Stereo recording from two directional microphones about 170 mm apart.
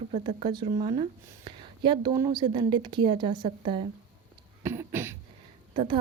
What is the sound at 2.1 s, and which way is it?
Speech, 20° right (ahead or behind).